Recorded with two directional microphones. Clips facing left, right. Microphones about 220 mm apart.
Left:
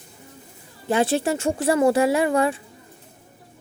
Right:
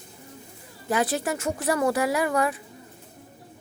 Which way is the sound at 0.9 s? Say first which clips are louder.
Left 5 dB; 30° left (ahead or behind).